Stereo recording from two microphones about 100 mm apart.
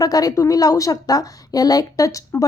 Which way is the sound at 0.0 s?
35° left (ahead or behind).